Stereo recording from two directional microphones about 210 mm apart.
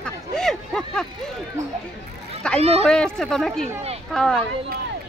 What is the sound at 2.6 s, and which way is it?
Speech, 30° right (ahead or behind).